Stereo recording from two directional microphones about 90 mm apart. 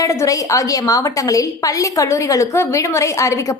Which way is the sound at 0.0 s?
35° left (ahead or behind).